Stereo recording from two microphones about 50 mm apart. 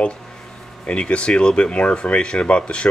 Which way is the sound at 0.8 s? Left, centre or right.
Left.